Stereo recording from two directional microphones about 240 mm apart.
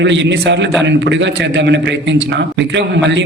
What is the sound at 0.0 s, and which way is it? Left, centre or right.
A man's voice, right.